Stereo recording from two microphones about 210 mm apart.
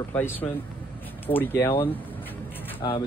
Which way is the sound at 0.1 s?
10° left (ahead or behind).